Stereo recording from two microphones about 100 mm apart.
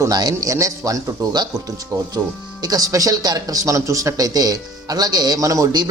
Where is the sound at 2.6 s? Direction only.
35° right (ahead or behind).